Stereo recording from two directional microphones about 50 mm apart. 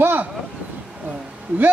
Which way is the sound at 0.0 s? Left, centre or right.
Right.